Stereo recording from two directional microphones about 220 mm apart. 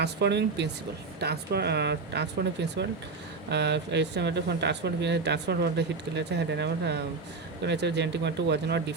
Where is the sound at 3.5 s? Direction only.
50° right (ahead or behind).